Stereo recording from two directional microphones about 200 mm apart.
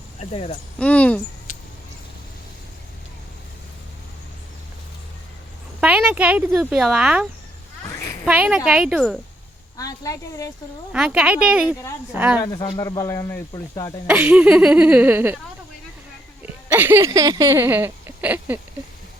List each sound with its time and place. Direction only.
0.2 s speech: 30° left (ahead or behind)
0.8 s speech: 5° left (ahead or behind)
5.8 s speech: 5° right (ahead or behind)
7.9 s children playing: 15° left (ahead or behind)
8.2 s speech: 5° right (ahead or behind)
9.7 s speech: 15° left (ahead or behind)
10.9 s speech: 5° right (ahead or behind)
12.4 s speech: 20° left (ahead or behind)
14.1 s speech: 5° right (ahead or behind)
16.6 s speech: 10° right (ahead or behind)